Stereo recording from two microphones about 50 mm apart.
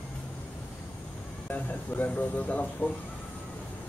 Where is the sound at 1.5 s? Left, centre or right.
Left.